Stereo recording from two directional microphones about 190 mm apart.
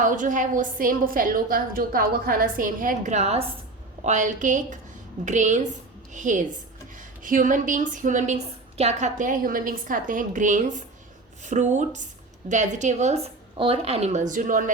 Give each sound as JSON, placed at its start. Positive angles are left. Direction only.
{"t": 0.0, "sound": "a woman's voice", "side_deg": -45}